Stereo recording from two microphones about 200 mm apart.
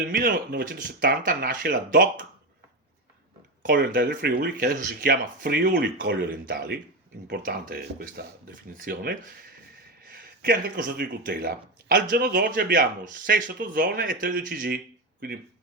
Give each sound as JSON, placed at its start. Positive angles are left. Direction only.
{"t": 0.2, "sound": "speech", "side_deg": -45}
{"t": 3.8, "sound": "speech", "side_deg": -50}